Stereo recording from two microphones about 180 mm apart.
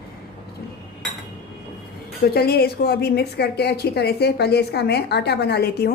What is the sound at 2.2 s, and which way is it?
A woman's voice, 60° left (ahead or behind).